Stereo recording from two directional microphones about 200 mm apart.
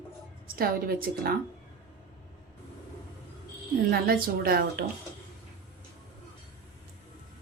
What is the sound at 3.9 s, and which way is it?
Speech, 50° right (ahead or behind).